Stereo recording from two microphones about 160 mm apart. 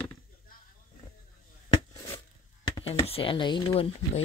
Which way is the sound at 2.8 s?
35° left (ahead or behind).